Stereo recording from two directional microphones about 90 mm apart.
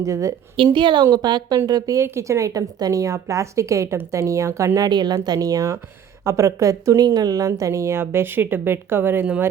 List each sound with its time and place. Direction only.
0.0 s speech: 35° right (ahead or behind)
0.5 s a woman's voice: 70° right (ahead or behind)
1.1 s speech: 50° right (ahead or behind); by 4.9 s 35° right (ahead or behind)
4.9 s a woman's voice: 50° right (ahead or behind); by 9.2 s 25° right (ahead or behind)